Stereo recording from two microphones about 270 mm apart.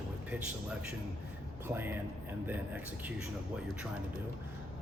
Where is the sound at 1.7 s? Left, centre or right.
Centre.